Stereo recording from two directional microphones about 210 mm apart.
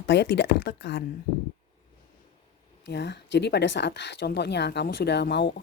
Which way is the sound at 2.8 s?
55° left (ahead or behind).